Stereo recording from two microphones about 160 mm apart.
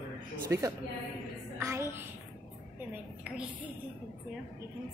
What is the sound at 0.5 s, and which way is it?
A woman's voice, 20° right (ahead or behind).